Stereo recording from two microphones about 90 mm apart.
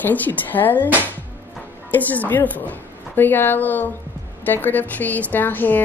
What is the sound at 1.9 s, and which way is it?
A woman's voice, 20° left (ahead or behind).